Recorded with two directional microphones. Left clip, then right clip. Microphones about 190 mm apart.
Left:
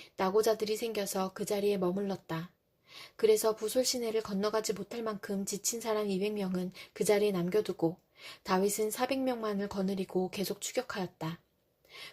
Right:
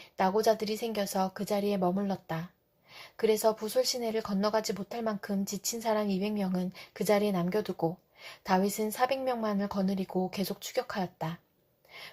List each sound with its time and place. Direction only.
0.2 s speech: 35° left (ahead or behind)
11.9 s gasp: 35° left (ahead or behind)